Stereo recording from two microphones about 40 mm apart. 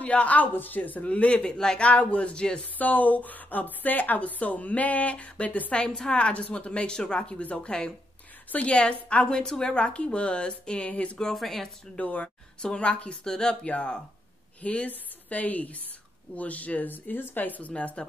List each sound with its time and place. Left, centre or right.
0.0 s a woman's voice: left
0.6 s speech: left
1.0 s a woman's voice: left
2.8 s a woman's voice: left
5.8 s a woman's voice: centre
11.3 s speech: centre
11.9 s a woman's voice: left; by 13.6 s centre
13.7 s a woman's voice: left
16.9 s speech: left